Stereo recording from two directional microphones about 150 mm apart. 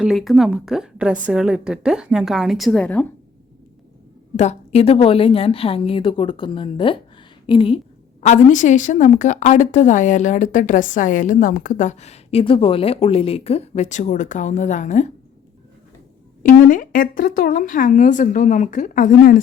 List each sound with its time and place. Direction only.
0.0 s a woman's voice: centre (ahead or behind)
4.4 s a woman's voice: 45° left (ahead or behind)
8.2 s a woman's voice: 50° left (ahead or behind)
16.4 s a woman's voice: 65° left (ahead or behind)